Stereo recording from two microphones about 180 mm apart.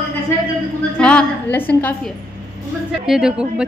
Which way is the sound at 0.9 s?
5° left (ahead or behind).